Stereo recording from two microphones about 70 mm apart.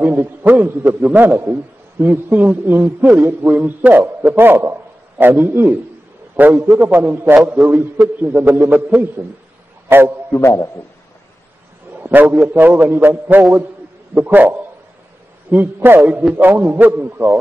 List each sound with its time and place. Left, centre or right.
0.0 s a man's voice: right
1.2 s a man's voice: right
8.5 s a man's voice: right
10.3 s a man's voice: left
12.0 s a man's voice: right
16.3 s a man's voice: right